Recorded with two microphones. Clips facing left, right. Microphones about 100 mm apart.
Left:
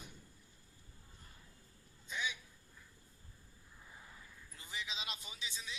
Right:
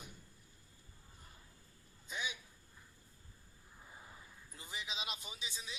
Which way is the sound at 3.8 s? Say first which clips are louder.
Right 1 dB; 20° right (ahead or behind).